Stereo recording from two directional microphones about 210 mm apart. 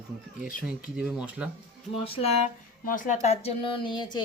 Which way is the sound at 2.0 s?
25° left (ahead or behind).